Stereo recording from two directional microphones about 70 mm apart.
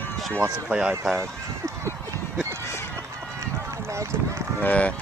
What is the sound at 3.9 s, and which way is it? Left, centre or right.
Run, right.